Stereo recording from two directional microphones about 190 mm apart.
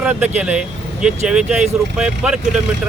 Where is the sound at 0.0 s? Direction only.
5° right (ahead or behind).